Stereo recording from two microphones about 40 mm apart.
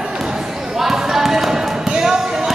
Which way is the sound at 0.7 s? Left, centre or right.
Centre.